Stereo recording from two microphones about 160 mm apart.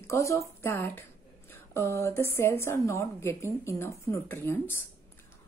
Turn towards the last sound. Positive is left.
turn(degrees=15)  # may be behind; listen again after turning